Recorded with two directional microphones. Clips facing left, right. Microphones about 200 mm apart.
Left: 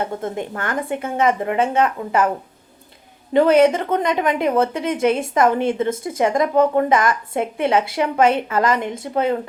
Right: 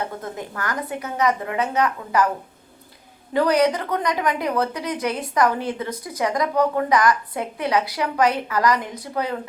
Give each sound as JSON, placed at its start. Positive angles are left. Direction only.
{"t": 0.0, "sound": "a woman's voice", "side_deg": 25}
{"t": 3.3, "sound": "a woman's voice", "side_deg": 25}